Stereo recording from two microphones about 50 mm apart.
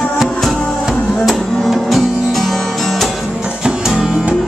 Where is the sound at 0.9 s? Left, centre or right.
Centre.